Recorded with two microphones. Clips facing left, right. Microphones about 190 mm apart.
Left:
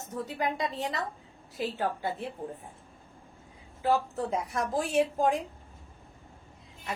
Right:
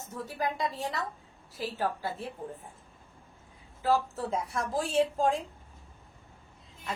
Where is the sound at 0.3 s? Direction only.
20° left (ahead or behind).